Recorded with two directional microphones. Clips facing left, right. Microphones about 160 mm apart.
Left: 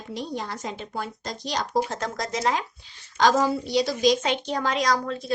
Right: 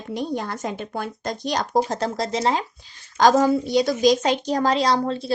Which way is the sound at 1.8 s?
35° right (ahead or behind).